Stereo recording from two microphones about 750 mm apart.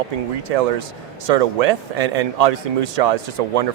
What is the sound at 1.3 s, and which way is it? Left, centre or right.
Speech, right.